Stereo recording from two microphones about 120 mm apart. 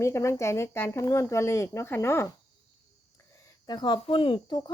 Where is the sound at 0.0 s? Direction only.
25° left (ahead or behind).